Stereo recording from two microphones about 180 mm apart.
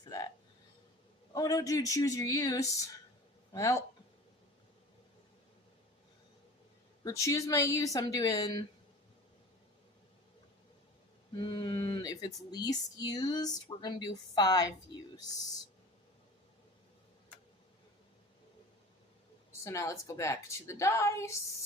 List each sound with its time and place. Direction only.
0.0 s a sound: 20° left (ahead or behind)
1.3 s a woman's voice: 20° left (ahead or behind)
7.0 s speech: 15° left (ahead or behind)
11.3 s speech: 25° left (ahead or behind)
19.5 s a woman's voice: 15° left (ahead or behind)